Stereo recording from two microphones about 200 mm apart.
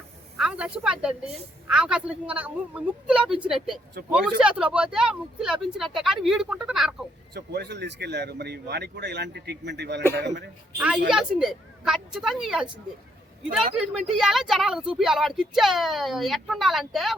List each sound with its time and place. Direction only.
0.3 s speech: 5° right (ahead or behind)
7.3 s speech: 55° right (ahead or behind)
10.8 s a woman's voice: 5° right (ahead or behind)